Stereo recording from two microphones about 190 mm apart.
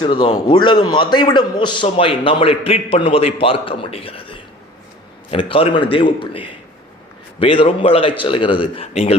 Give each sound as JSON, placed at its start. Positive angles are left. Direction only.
{"t": 0.0, "sound": "a man's voice", "side_deg": 25}